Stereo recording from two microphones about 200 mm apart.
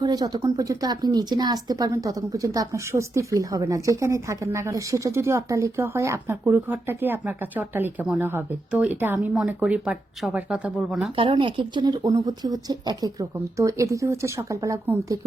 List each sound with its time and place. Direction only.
0.0 s speech: 20° right (ahead or behind); by 11.1 s 5° right (ahead or behind)
11.2 s speech: 25° right (ahead or behind)